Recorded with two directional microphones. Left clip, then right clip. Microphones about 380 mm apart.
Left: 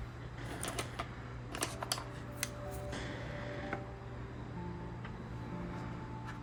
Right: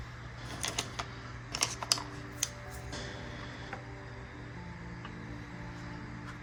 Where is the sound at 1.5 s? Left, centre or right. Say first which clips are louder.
Right 7 dB; right.